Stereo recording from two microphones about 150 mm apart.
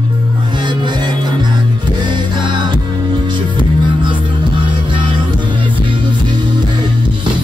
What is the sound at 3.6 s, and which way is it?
Music, 35° right (ahead or behind).